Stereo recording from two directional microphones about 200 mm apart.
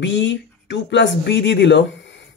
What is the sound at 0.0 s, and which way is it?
Speech, 60° left (ahead or behind).